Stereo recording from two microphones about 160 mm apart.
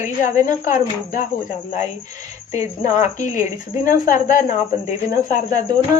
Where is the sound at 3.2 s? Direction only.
50° left (ahead or behind).